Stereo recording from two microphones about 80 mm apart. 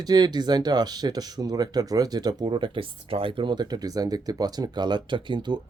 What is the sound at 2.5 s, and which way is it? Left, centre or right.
Speech, right.